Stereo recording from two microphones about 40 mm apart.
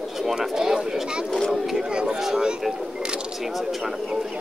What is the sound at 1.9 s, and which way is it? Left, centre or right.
Speech, right.